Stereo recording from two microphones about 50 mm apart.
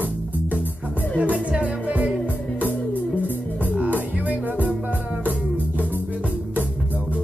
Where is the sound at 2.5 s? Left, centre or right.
Left.